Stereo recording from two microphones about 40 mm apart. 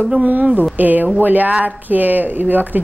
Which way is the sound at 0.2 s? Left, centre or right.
Right.